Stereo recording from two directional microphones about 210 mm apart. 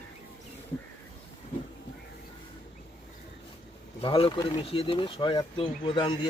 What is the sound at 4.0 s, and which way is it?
Speech, 25° left (ahead or behind).